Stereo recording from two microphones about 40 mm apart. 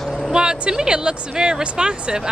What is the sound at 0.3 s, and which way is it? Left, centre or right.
Speech, centre.